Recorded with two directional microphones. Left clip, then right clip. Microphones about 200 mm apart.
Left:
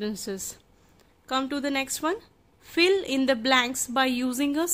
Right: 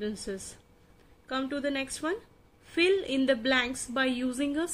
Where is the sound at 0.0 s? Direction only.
45° left (ahead or behind).